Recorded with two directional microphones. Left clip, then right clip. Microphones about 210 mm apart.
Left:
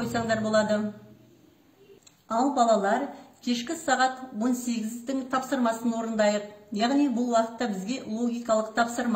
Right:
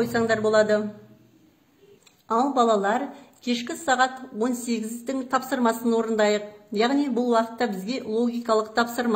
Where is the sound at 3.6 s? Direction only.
40° right (ahead or behind).